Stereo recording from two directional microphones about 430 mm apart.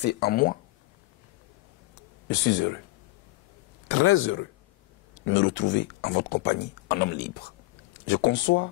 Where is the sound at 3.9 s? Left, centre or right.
Left.